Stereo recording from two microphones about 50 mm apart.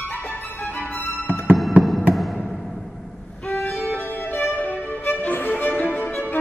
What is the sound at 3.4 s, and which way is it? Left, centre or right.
Violin, left.